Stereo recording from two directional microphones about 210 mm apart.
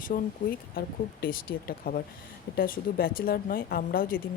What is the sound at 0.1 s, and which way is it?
Speech, 40° left (ahead or behind).